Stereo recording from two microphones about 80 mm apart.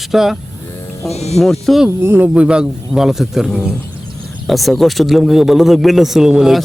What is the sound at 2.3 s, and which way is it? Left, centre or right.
A man's voice, centre.